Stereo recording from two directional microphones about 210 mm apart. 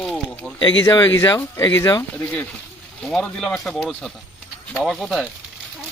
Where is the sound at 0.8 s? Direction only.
20° left (ahead or behind).